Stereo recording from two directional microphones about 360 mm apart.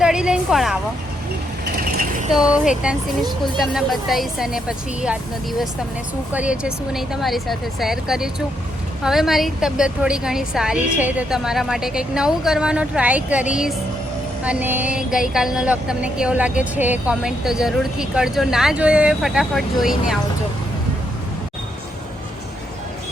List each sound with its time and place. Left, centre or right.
0.0 s speech: centre
2.3 s speech: centre
6.3 s speech: centre